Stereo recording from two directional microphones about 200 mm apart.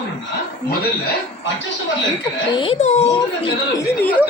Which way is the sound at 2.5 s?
30° left (ahead or behind).